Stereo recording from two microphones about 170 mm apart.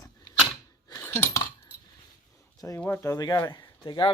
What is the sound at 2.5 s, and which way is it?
Speech, 20° left (ahead or behind).